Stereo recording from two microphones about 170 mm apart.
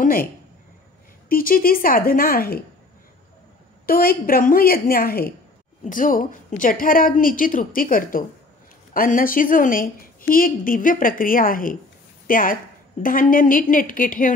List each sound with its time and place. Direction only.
0.0 s a sound: 55° left (ahead or behind)
1.3 s a woman's voice: 55° left (ahead or behind)
3.8 s a woman's voice: 60° left (ahead or behind)